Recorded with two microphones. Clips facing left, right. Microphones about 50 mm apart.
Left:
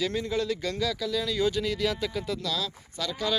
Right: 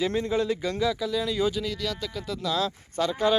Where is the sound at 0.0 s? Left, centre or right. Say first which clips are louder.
Right 3 dB; right.